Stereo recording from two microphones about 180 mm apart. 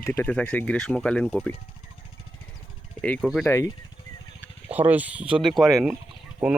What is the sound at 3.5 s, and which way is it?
Speech, 15° left (ahead or behind).